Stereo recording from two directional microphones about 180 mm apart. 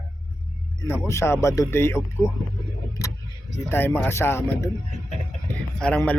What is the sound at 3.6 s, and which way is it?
Speech, 10° left (ahead or behind).